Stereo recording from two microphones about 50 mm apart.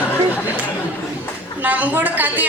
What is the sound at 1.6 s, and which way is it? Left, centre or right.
Speech, right.